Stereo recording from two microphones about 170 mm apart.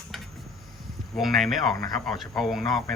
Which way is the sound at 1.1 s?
Centre (ahead or behind).